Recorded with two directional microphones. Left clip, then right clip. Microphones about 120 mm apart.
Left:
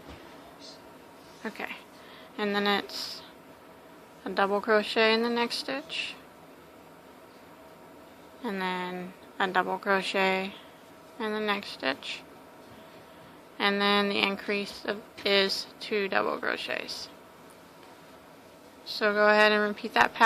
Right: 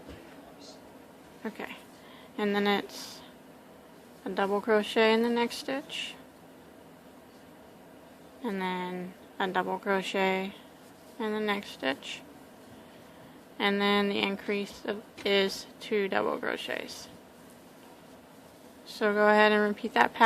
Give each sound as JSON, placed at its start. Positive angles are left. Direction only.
{"t": 1.4, "sound": "speech", "side_deg": -25}
{"t": 4.2, "sound": "speech", "side_deg": -15}
{"t": 8.4, "sound": "a woman's voice", "side_deg": -20}
{"t": 13.6, "sound": "speech", "side_deg": -25}
{"t": 18.9, "sound": "speech", "side_deg": -30}